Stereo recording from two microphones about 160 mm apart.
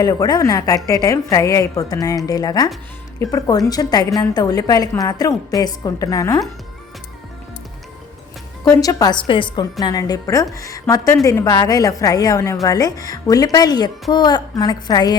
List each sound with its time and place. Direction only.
0.0 s a woman's voice: 25° left (ahead or behind)
8.6 s a woman's voice: 20° left (ahead or behind)